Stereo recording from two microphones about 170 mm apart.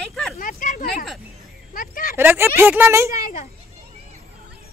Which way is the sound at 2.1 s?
15° right (ahead or behind).